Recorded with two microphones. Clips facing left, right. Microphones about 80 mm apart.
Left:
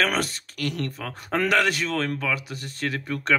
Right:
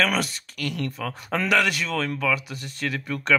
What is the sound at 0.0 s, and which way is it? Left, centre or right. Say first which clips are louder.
Speech: even; left.